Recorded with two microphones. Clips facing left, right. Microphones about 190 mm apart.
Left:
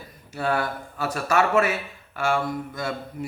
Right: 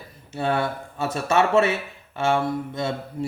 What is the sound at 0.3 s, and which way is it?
Speech, 25° right (ahead or behind).